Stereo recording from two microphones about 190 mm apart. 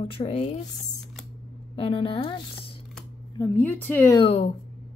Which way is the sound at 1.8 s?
30° left (ahead or behind).